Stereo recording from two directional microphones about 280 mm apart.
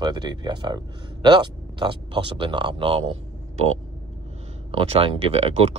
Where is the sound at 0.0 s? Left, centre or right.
Centre.